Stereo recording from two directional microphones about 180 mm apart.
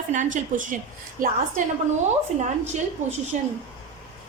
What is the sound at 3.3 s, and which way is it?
Speech, 45° right (ahead or behind).